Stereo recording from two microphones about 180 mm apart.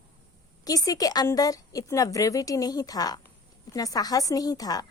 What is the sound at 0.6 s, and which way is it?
A woman's voice, 20° left (ahead or behind).